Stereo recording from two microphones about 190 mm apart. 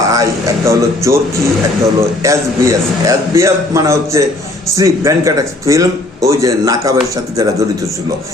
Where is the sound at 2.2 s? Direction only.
15° right (ahead or behind).